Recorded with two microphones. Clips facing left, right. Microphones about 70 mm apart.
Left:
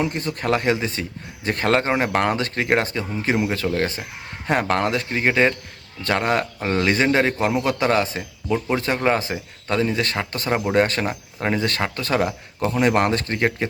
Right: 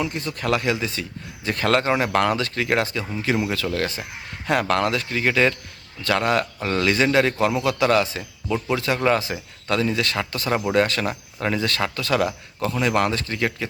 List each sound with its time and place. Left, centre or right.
0.0 s speech: left
8.4 s speech: centre; by 13.7 s left